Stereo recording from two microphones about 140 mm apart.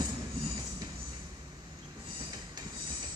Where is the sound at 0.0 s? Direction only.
30° right (ahead or behind).